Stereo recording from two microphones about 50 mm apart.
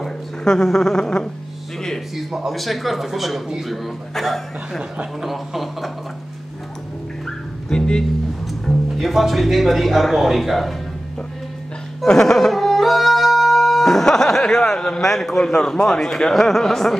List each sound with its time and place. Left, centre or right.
0.0 s speech: centre
2.1 s speech: centre
7.2 s music: centre
8.9 s speech: centre
12.1 s music: centre
15.0 s a man's voice: centre